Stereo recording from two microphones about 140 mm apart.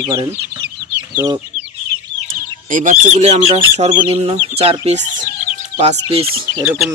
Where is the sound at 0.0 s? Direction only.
35° right (ahead or behind).